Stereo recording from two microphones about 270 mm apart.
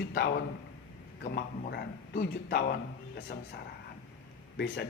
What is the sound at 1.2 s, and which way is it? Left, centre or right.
A man's voice, left.